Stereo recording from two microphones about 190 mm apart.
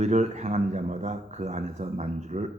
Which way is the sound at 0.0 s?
35° right (ahead or behind).